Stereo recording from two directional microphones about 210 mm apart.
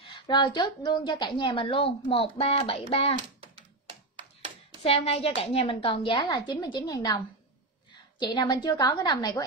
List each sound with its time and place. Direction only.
0.1 s a woman's voice: 20° left (ahead or behind)
3.3 s a sound: 25° right (ahead or behind)
4.8 s a woman's voice: 30° left (ahead or behind)